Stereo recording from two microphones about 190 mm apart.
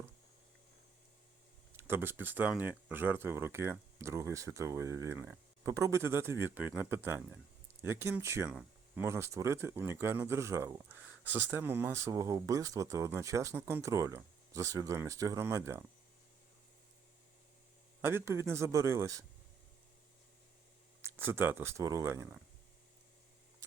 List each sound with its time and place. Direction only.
1.7 s speech: 10° right (ahead or behind)
18.0 s speech: 15° right (ahead or behind)
21.0 s speech: 10° right (ahead or behind)